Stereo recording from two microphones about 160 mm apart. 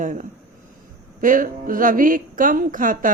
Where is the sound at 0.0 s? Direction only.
55° right (ahead or behind).